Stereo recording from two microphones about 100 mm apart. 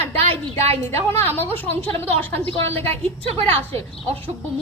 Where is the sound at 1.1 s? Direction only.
20° left (ahead or behind).